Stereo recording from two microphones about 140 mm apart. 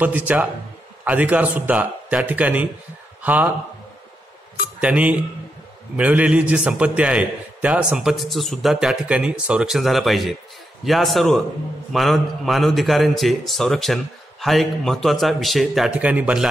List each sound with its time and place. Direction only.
0.0 s a man's voice: 10° right (ahead or behind)
4.7 s a man's voice: 10° right (ahead or behind)